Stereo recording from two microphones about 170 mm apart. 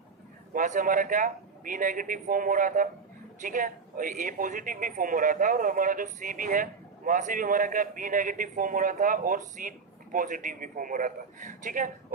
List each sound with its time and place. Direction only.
0.5 s speech: 50° right (ahead or behind)